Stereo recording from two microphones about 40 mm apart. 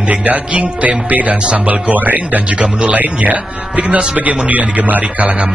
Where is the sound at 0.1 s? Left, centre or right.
Right.